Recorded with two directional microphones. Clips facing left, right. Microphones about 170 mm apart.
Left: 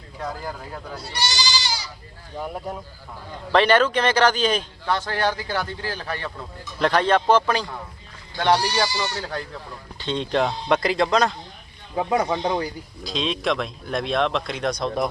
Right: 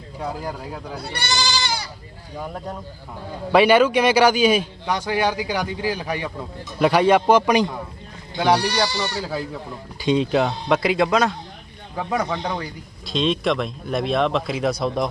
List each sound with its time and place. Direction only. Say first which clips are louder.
0.2 s a man's voice: right 2 dB; 10° right (ahead or behind)
0.9 s speech: right 2 dB; 55° right (ahead or behind)
2.4 s speech: left 1 dB; 10° left (ahead or behind)
3.5 s a man's voice: right 3 dB; 10° right (ahead or behind)
11.9 s speech: left 2 dB; 15° left (ahead or behind)
13.1 s speech: right 4 dB; centre (ahead or behind)